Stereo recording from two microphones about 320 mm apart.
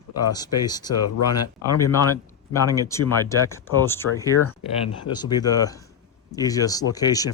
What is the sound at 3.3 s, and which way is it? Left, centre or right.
Speech, centre.